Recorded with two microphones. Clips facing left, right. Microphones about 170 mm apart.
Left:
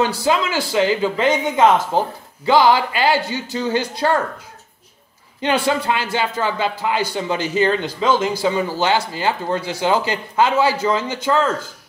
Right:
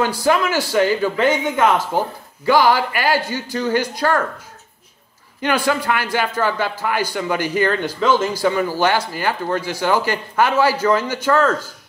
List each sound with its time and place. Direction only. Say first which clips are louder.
0.0 s speech: right 1 dB; 20° left (ahead or behind)
5.4 s speech: even; 25° left (ahead or behind)